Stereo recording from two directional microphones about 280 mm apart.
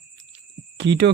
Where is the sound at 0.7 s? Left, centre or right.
Right.